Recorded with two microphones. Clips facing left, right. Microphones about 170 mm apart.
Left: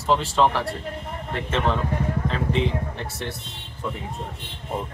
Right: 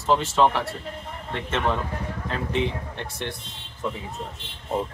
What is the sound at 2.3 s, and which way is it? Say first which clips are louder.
Speech: right 1 dB; centre (ahead or behind).